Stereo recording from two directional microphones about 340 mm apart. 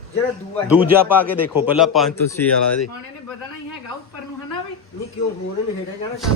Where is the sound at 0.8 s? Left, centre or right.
Centre.